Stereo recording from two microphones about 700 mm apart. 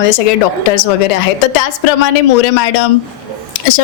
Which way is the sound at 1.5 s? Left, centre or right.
Left.